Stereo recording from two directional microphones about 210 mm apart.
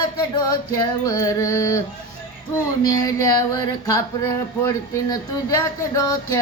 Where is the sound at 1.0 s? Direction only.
15° left (ahead or behind).